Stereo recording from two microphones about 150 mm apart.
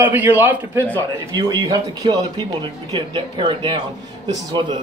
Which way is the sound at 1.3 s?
25° right (ahead or behind).